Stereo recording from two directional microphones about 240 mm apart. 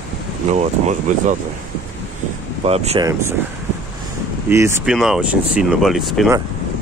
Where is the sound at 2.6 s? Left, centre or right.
Right.